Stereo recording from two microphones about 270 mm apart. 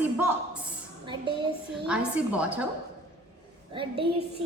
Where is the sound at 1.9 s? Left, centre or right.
Centre.